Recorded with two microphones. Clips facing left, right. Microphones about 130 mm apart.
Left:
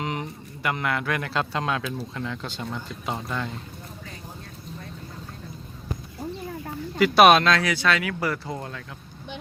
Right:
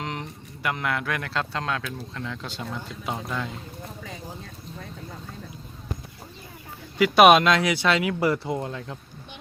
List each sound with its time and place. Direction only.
0.0 s speech: 5° left (ahead or behind)
7.0 s speech: 5° right (ahead or behind)
7.3 s speech: 15° right (ahead or behind)